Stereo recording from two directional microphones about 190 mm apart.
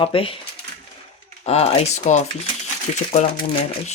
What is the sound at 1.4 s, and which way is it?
Speech, 35° left (ahead or behind).